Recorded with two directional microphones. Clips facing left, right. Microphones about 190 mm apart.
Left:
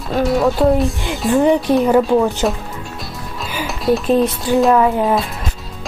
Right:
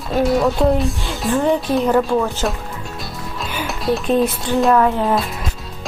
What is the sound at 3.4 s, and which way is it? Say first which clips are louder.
Music: left 1 dB; centre (ahead or behind).